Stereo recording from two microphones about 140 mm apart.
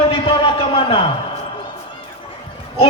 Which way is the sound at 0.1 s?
40° left (ahead or behind).